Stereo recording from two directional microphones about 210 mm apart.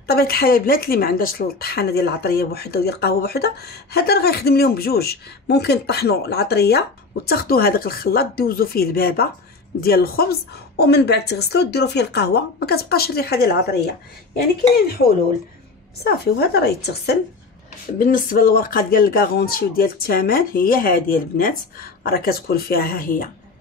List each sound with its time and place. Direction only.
0.0 s speech: 45° left (ahead or behind)